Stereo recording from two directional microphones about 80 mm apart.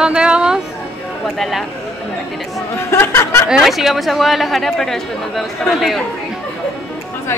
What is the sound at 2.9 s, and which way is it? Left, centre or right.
Speech, left.